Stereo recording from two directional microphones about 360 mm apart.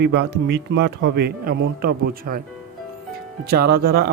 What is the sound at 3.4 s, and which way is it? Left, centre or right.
Speech, right.